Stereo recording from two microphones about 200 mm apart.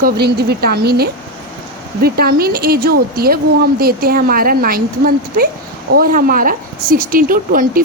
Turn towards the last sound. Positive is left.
turn(degrees=-45)  # may be behind; listen again after turning